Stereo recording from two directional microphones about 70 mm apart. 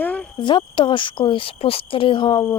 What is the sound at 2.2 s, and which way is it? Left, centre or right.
Speech, left.